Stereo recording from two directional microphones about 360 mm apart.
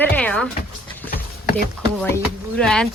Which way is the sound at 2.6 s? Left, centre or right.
Centre.